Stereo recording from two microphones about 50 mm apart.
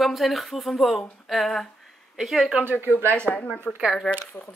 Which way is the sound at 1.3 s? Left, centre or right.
Centre.